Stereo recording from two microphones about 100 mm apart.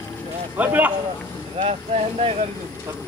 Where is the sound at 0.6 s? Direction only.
20° right (ahead or behind).